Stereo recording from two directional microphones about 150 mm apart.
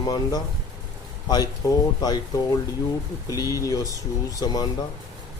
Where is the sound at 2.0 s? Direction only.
25° left (ahead or behind).